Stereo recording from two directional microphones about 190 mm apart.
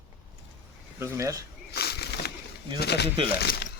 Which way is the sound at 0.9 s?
15° right (ahead or behind).